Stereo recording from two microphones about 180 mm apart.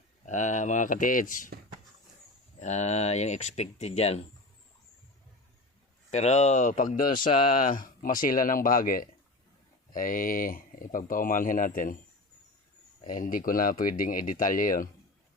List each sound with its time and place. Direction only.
0.3 s speech: 45° left (ahead or behind)
2.6 s speech: 40° left (ahead or behind)
6.1 s speech: 40° left (ahead or behind)
13.1 s speech: 50° left (ahead or behind)